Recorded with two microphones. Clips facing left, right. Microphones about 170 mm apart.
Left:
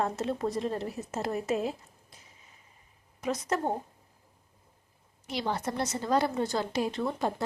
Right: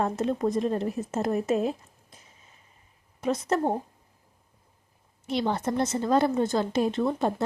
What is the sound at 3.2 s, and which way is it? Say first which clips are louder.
Speech: right 5 dB; 30° right (ahead or behind).